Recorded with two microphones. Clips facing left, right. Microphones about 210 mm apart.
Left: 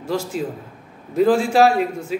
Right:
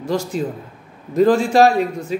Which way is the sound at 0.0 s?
5° left (ahead or behind).